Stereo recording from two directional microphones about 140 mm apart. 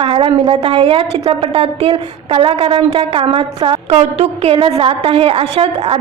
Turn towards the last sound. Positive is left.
turn(degrees=-45)  # may be behind; listen again after turning